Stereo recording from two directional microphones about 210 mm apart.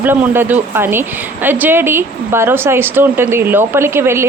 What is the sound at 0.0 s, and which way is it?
Speech, 10° right (ahead or behind).